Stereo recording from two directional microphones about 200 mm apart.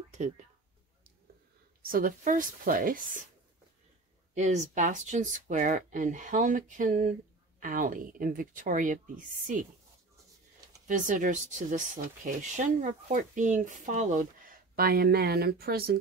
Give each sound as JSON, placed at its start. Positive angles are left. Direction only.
{"t": 1.8, "sound": "speech", "side_deg": -45}
{"t": 4.4, "sound": "speech", "side_deg": -35}
{"t": 10.9, "sound": "speech", "side_deg": -40}